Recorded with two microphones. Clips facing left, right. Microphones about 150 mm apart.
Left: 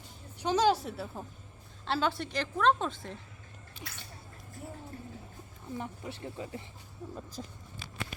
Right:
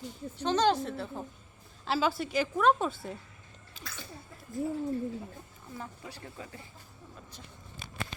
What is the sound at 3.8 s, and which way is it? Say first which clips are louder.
Speech: even; 90° right.